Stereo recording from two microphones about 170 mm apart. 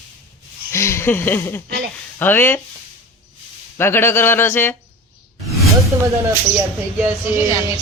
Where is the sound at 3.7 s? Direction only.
15° left (ahead or behind).